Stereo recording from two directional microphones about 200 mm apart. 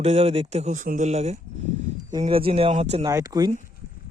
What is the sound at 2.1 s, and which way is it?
Speech, 25° right (ahead or behind).